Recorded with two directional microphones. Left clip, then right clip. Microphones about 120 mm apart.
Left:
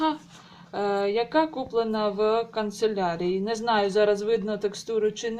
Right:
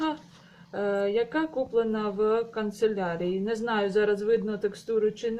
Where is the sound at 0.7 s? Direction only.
10° left (ahead or behind).